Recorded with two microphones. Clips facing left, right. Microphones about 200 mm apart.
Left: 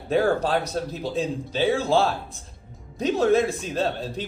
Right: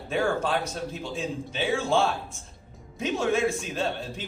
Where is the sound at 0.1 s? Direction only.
35° left (ahead or behind).